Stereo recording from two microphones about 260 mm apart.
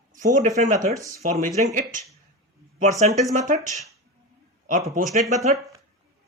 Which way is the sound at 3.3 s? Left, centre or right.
Right.